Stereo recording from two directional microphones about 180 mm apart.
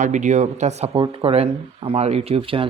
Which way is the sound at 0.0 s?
45° right (ahead or behind).